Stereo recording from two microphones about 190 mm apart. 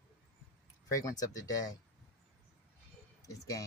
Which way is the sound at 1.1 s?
20° left (ahead or behind).